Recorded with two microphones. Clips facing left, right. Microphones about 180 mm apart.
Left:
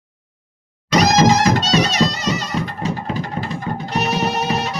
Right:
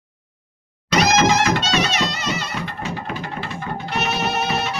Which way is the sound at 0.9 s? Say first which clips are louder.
Left 3 dB; 40° left (ahead or behind).